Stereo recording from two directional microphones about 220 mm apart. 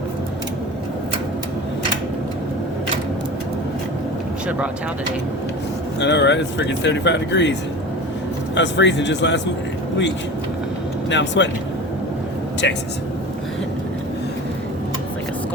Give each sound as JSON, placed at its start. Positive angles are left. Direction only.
{"t": 6.0, "sound": "speech", "side_deg": 50}
{"t": 8.5, "sound": "speech", "side_deg": 55}
{"t": 11.1, "sound": "speech", "side_deg": 55}
{"t": 12.6, "sound": "speech", "side_deg": 55}